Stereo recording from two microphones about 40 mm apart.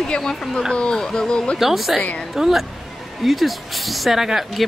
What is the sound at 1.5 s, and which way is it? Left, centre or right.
Speech, centre.